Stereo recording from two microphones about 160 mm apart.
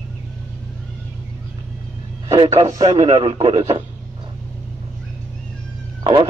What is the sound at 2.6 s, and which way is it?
Speech, 20° right (ahead or behind).